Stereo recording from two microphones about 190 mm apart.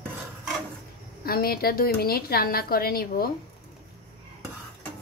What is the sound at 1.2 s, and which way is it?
A woman's voice, 50° left (ahead or behind).